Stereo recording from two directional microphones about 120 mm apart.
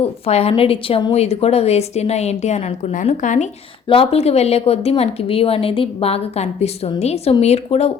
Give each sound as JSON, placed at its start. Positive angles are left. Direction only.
{"t": 0.0, "sound": "a woman's voice", "side_deg": 60}
{"t": 3.8, "sound": "a woman's voice", "side_deg": 55}